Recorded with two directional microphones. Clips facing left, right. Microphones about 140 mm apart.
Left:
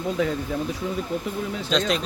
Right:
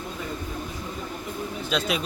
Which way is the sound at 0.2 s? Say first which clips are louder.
Left 11 dB; 90° left.